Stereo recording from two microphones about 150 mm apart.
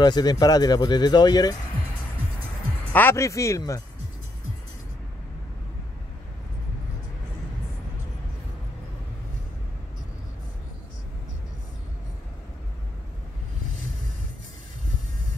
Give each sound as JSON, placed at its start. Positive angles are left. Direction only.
{"t": 0.0, "sound": "speech", "side_deg": 30}
{"t": 2.9, "sound": "speech", "side_deg": 15}